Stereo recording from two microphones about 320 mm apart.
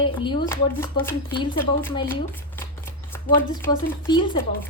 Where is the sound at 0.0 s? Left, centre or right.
Centre.